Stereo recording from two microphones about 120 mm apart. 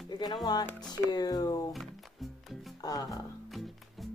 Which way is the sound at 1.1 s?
35° left (ahead or behind).